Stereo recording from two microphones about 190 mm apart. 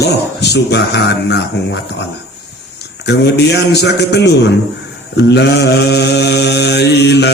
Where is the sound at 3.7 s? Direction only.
60° left (ahead or behind).